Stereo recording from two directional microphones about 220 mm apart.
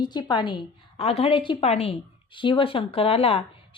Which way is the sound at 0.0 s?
20° left (ahead or behind).